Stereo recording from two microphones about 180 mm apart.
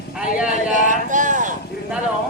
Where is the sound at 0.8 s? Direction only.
45° right (ahead or behind).